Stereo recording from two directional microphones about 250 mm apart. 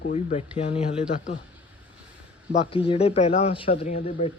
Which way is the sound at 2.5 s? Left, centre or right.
Left.